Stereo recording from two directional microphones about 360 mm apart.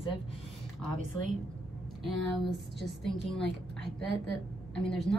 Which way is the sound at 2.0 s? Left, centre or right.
Centre.